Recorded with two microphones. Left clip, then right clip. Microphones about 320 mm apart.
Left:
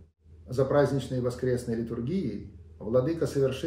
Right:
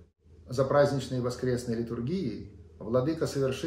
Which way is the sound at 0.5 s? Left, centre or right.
Centre.